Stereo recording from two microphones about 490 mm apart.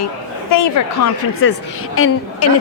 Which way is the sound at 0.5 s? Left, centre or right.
Left.